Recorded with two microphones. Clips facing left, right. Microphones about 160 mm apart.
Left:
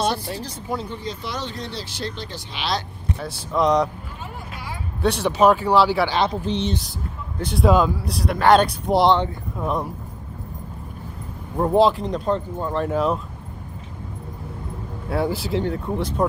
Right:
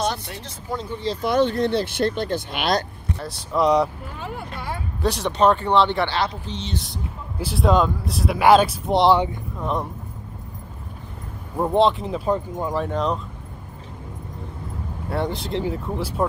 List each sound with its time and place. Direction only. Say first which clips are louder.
0.0 s speech: left 2 dB; 25° left (ahead or behind)
1.2 s speech: right 11 dB; 55° right (ahead or behind)
3.2 s speech: even; centre (ahead or behind)
5.0 s speech: left 2 dB; centre (ahead or behind)
7.3 s speech: left 1 dB; centre (ahead or behind)
11.5 s speech: left 1 dB; centre (ahead or behind)
12.7 s speech: left 3 dB; 5° left (ahead or behind)
15.0 s speech: left 2 dB; 5° left (ahead or behind)